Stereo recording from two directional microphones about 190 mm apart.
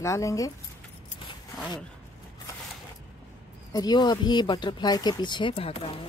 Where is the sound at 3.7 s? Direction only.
20° left (ahead or behind).